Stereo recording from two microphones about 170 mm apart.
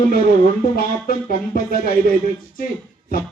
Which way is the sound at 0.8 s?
60° left (ahead or behind).